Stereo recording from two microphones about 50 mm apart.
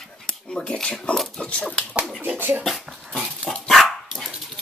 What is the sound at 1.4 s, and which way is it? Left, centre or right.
Dog, left.